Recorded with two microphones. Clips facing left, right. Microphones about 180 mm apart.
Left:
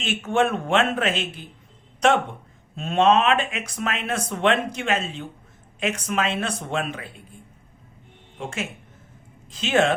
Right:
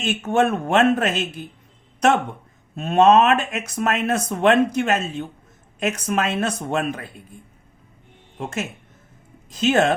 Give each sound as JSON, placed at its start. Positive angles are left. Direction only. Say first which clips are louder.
{"t": 0.0, "sound": "speech", "louder": "right 2 dB", "side_deg": -40}
{"t": 2.7, "sound": "speech", "louder": "right 4 dB", "side_deg": -45}
{"t": 8.4, "sound": "speech", "louder": "right 3 dB", "side_deg": -45}